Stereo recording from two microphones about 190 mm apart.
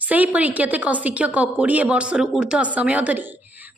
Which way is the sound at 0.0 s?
10° right (ahead or behind).